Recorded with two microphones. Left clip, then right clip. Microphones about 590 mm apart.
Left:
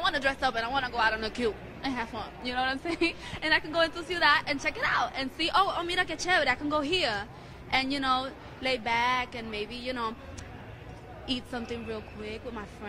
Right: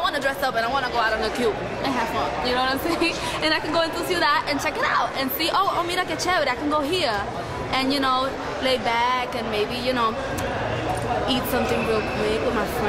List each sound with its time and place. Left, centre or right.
0.0 s a woman's voice: left